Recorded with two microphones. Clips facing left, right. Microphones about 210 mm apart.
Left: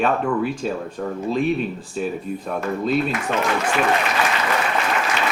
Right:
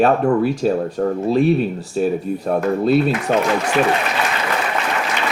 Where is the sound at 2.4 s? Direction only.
40° right (ahead or behind).